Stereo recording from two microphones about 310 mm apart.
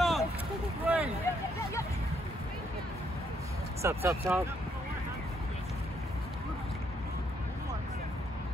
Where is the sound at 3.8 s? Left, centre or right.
Centre.